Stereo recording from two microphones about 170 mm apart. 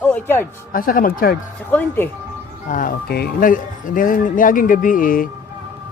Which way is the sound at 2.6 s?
50° left (ahead or behind).